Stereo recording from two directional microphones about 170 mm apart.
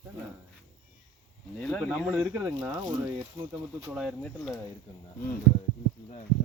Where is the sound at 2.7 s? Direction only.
25° right (ahead or behind).